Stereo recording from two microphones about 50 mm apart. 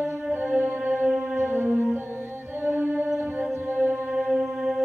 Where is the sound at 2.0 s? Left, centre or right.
Right.